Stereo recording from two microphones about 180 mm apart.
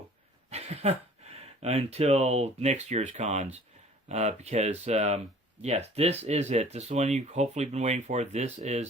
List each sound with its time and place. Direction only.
0.5 s speech: 35° right (ahead or behind)